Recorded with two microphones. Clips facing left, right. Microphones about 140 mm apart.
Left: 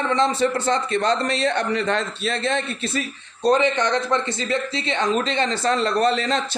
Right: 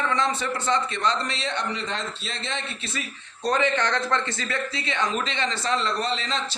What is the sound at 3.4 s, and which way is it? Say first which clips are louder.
A man's voice: left 5 dB; 20° left (ahead or behind).